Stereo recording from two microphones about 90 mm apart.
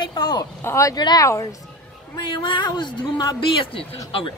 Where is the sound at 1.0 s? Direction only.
50° left (ahead or behind).